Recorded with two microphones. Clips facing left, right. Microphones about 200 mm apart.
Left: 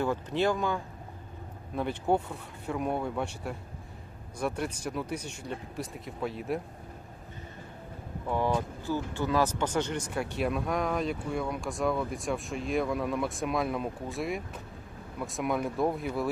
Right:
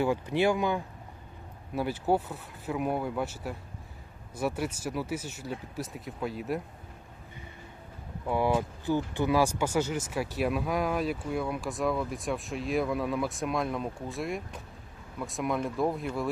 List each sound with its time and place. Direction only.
0.0 s speech: 10° right (ahead or behind)
8.3 s speech: 10° right (ahead or behind)